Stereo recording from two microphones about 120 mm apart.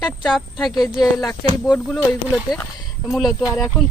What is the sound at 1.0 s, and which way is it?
Speech, 30° left (ahead or behind).